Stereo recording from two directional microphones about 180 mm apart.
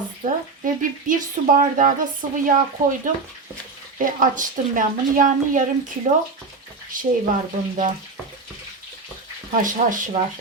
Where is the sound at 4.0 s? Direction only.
45° right (ahead or behind).